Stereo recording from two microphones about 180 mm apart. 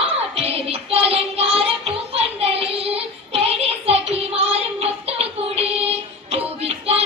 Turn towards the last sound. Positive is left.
turn(degrees=-35)  # may be behind; listen again after turning